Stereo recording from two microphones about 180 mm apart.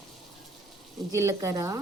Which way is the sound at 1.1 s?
15° right (ahead or behind).